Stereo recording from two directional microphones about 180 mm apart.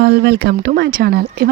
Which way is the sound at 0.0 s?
65° right (ahead or behind).